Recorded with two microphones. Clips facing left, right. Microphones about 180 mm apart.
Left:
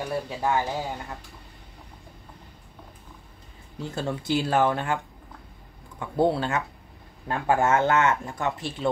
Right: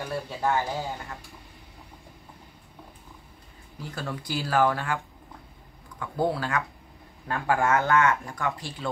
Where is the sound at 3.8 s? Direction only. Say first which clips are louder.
Left 5 dB; 25° left (ahead or behind).